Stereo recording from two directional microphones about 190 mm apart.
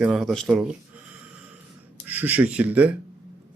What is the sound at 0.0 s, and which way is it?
Speech, 5° right (ahead or behind).